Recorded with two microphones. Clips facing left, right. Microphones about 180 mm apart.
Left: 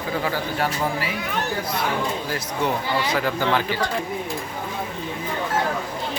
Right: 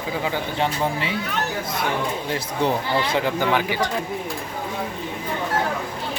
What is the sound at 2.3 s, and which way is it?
Speech, 30° right (ahead or behind).